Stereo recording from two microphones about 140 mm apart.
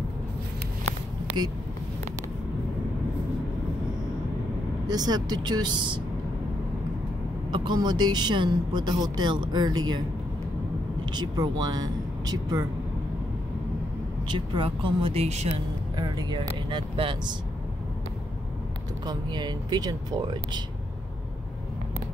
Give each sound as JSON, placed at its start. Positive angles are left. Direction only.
{"t": 4.8, "sound": "a woman's voice", "side_deg": -30}
{"t": 7.5, "sound": "a woman's voice", "side_deg": -30}
{"t": 11.1, "sound": "speech", "side_deg": -30}
{"t": 14.2, "sound": "a woman's voice", "side_deg": -35}
{"t": 16.0, "sound": "a woman's voice", "side_deg": -30}
{"t": 19.0, "sound": "a woman's voice", "side_deg": -30}